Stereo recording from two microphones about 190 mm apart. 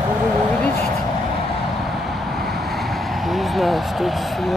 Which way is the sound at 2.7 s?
Centre (ahead or behind).